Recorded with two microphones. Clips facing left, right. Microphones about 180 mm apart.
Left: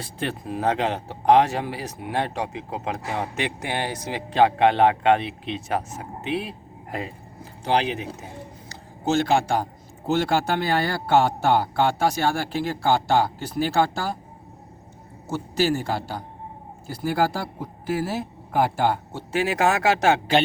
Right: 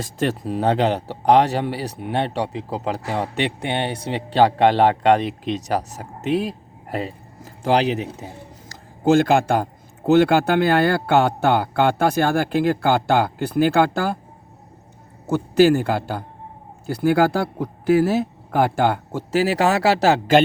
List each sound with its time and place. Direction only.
0.0 s speech: 40° right (ahead or behind)
8.7 s a man's voice: 50° right (ahead or behind)
15.3 s a man's voice: 60° right (ahead or behind)
19.3 s speech: 35° right (ahead or behind)